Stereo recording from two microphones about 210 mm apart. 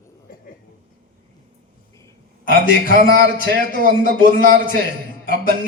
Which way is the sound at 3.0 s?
50° right (ahead or behind).